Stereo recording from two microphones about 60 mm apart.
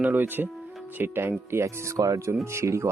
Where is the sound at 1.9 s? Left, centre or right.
Right.